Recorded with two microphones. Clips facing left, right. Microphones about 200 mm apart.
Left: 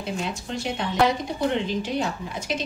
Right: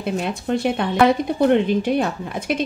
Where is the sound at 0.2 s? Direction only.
55° right (ahead or behind).